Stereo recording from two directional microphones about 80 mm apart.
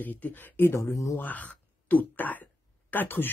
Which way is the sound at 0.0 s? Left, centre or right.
Left.